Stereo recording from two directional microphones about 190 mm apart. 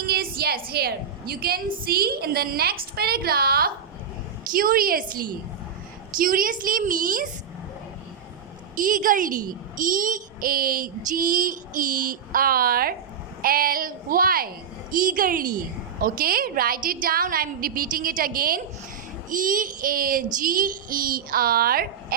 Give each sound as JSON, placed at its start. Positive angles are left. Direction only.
{"t": 0.0, "sound": "a sound", "side_deg": -55}
{"t": 0.7, "sound": "a child's voice", "side_deg": -55}
{"t": 8.7, "sound": "a child's voice", "side_deg": -45}